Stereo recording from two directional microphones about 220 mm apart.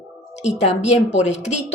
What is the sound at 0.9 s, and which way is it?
Speech, 30° left (ahead or behind).